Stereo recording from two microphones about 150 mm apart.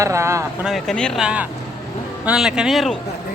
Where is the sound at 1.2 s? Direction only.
10° right (ahead or behind).